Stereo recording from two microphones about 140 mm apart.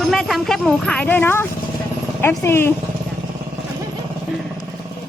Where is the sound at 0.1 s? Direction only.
Centre (ahead or behind); by 2.7 s 15° left (ahead or behind).